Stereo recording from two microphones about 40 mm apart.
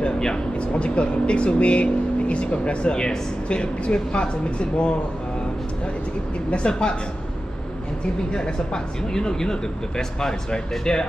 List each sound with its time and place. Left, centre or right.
0.6 s speech: left
6.5 s speech: left
8.3 s speech: left